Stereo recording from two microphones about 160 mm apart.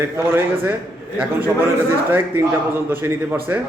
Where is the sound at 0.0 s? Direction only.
15° right (ahead or behind).